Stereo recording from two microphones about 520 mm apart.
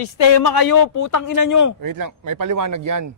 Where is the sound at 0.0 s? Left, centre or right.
Left.